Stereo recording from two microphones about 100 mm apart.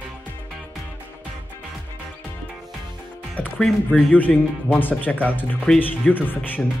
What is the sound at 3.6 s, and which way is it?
Speech, 5° left (ahead or behind).